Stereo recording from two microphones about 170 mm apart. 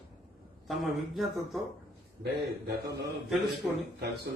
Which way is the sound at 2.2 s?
70° right (ahead or behind).